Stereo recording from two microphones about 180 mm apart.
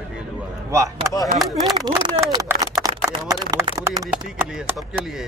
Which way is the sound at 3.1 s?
25° right (ahead or behind).